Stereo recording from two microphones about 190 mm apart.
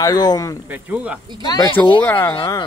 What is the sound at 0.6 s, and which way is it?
Speech, 5° right (ahead or behind).